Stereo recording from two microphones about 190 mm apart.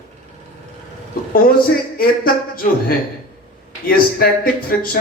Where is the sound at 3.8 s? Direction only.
50° left (ahead or behind).